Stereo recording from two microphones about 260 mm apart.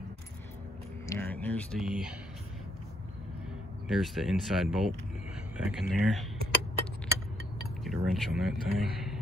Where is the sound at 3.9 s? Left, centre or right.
Centre.